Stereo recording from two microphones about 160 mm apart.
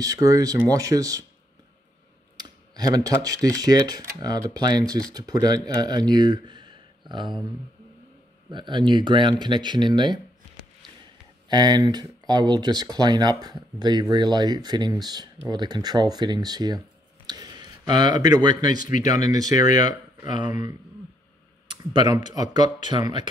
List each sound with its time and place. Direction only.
0.0 s speech: 20° right (ahead or behind)
2.3 s speech: 25° right (ahead or behind)
8.5 s speech: 30° right (ahead or behind)
11.4 s speech: 25° right (ahead or behind)
21.6 s speech: 30° right (ahead or behind)